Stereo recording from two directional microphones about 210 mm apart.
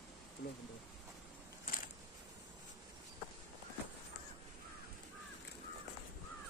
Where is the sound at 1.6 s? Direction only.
40° left (ahead or behind).